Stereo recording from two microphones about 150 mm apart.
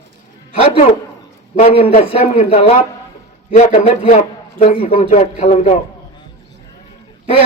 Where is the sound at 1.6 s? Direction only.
45° left (ahead or behind).